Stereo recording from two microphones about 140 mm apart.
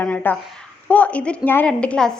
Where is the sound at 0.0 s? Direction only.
10° left (ahead or behind).